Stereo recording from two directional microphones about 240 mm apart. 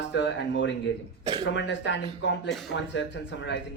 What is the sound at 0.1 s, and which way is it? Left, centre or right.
Speech, left.